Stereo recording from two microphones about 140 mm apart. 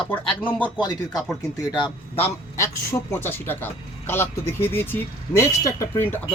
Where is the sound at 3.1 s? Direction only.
15° left (ahead or behind).